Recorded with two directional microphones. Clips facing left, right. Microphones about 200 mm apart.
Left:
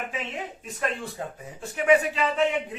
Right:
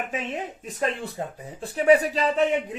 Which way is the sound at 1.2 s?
30° right (ahead or behind).